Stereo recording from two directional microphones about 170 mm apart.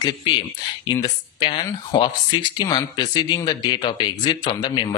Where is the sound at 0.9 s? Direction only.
25° left (ahead or behind).